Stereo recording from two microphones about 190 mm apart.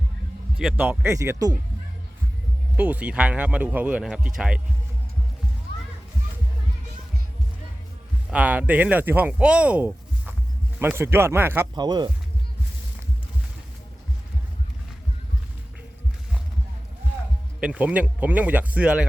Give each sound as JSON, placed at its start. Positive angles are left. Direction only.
{"t": 0.8, "sound": "speech", "side_deg": -10}
{"t": 2.7, "sound": "speech", "side_deg": -10}
{"t": 8.3, "sound": "speech", "side_deg": -5}
{"t": 11.7, "sound": "speech", "side_deg": -20}
{"t": 17.6, "sound": "speech", "side_deg": -5}